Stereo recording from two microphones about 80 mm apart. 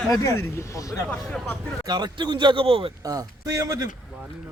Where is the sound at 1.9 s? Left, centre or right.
Right.